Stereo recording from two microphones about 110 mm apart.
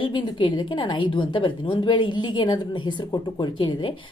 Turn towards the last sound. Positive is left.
turn(degrees=50)  # may be behind; listen again after turning